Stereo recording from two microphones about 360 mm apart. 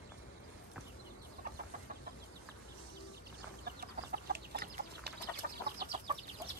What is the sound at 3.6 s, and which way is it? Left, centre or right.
Chicken, right.